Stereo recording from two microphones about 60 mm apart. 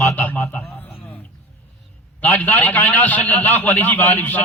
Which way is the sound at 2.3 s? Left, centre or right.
Left.